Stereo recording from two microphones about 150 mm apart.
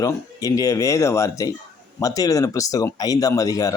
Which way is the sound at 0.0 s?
20° left (ahead or behind).